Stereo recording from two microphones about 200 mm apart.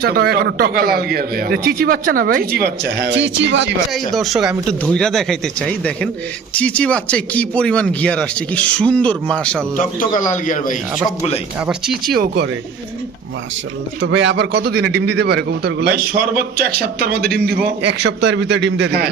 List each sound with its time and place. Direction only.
0.0 s a man's voice: 50° right (ahead or behind)
3.9 s speech: centre (ahead or behind)
10.2 s a man's voice: 40° left (ahead or behind)
11.6 s speech: 5° right (ahead or behind)
12.1 s a man's voice: 55° right (ahead or behind)
14.0 s a man's voice: 65° right (ahead or behind)